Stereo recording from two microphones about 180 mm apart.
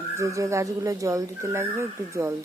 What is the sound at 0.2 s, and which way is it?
Speech, 15° right (ahead or behind).